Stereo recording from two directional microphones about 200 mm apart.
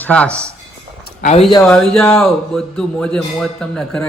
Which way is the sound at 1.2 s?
35° left (ahead or behind).